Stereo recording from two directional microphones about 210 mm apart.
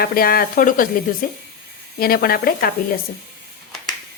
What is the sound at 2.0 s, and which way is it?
Speech, 45° left (ahead or behind).